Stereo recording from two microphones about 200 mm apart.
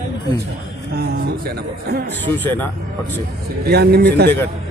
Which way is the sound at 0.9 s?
50° right (ahead or behind).